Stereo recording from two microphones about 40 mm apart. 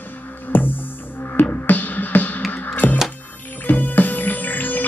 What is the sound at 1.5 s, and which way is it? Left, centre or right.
Music, left.